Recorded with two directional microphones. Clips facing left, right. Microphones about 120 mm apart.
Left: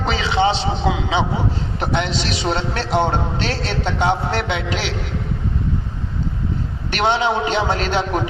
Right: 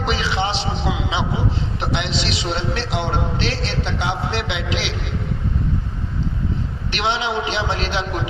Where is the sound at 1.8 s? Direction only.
45° left (ahead or behind).